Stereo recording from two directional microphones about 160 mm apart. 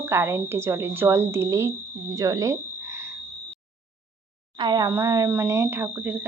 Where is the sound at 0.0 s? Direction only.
15° right (ahead or behind).